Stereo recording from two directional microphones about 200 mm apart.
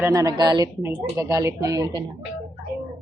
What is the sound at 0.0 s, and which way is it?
A woman's voice, 15° right (ahead or behind).